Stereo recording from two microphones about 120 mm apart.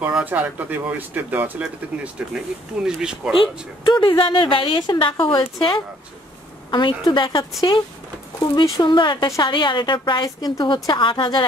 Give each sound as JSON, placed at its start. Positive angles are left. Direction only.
{"t": 0.0, "sound": "speech", "side_deg": -15}
{"t": 3.3, "sound": "a woman's voice", "side_deg": 40}